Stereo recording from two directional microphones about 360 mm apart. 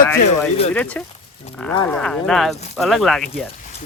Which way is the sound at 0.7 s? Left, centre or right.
Centre.